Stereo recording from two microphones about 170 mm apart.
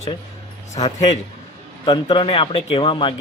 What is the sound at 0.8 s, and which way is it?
Speech, 40° left (ahead or behind).